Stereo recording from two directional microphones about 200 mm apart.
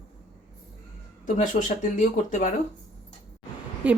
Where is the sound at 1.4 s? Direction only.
35° left (ahead or behind).